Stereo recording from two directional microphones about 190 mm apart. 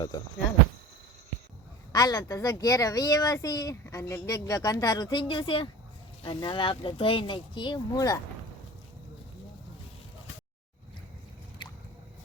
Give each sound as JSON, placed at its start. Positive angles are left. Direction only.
{"t": 1.9, "sound": "speech", "side_deg": 20}